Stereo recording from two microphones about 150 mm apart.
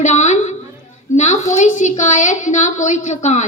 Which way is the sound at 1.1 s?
50° left (ahead or behind).